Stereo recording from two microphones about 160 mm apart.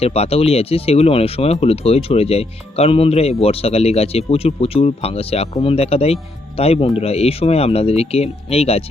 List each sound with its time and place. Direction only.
0.0 s speech: 40° left (ahead or behind)